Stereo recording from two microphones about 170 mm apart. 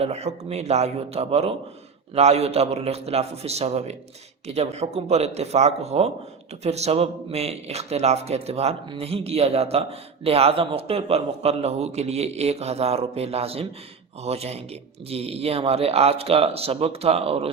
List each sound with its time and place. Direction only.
0.0 s speech: 40° right (ahead or behind)